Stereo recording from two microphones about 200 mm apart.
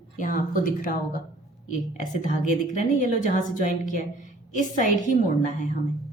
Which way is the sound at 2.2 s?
40° left (ahead or behind).